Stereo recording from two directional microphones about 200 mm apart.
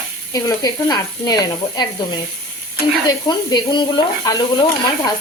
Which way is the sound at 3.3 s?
20° left (ahead or behind).